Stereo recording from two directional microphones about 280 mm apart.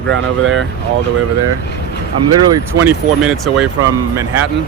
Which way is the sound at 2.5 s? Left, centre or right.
Centre.